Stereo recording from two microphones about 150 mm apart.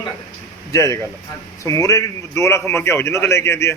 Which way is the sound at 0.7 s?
20° left (ahead or behind).